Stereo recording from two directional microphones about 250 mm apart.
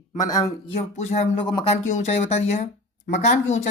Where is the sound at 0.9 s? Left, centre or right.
Left.